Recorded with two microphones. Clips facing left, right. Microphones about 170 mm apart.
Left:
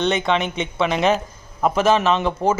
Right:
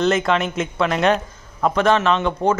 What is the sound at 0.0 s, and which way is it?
A man's voice, centre (ahead or behind).